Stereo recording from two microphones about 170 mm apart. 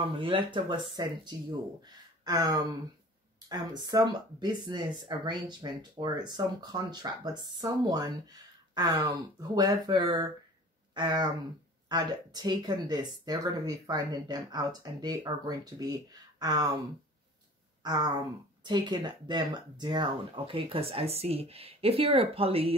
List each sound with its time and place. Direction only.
0.0 s speech: 30° right (ahead or behind)
17.8 s speech: 25° right (ahead or behind)